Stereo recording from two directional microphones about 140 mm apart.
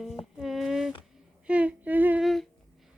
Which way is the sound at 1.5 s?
10° right (ahead or behind).